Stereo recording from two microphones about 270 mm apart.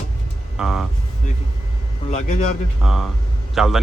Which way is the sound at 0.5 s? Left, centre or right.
Centre.